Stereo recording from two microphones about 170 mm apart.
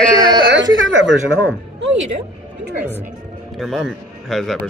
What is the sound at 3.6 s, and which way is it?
Speech, centre (ahead or behind).